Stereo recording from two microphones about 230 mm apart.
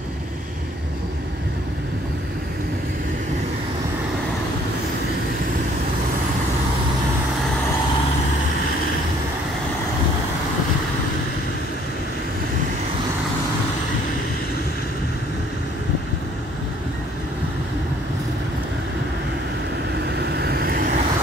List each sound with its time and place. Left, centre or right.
20.2 s vehicle: right